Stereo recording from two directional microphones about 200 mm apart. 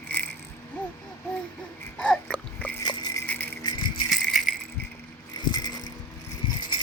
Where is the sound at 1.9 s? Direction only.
5° left (ahead or behind).